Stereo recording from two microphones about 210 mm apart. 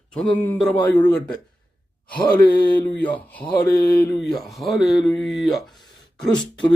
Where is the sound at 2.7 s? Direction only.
5° left (ahead or behind).